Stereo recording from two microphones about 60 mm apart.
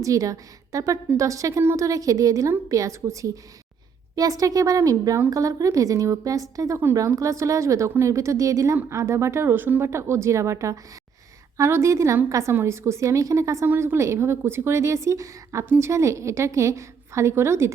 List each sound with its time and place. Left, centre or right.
0.0 s a woman's voice: right
4.1 s a woman's voice: right
5.3 s a woman's voice: right
7.2 s a woman's voice: right
9.8 s a woman's voice: right
13.7 s a woman's voice: right